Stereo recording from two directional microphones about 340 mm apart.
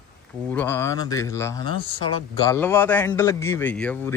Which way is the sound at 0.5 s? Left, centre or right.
Centre.